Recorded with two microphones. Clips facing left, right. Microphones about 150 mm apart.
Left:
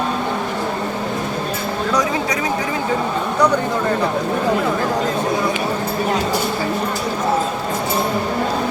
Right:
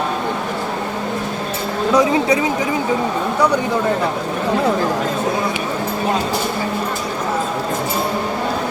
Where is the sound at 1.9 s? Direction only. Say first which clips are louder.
Right 7 dB; 25° right (ahead or behind).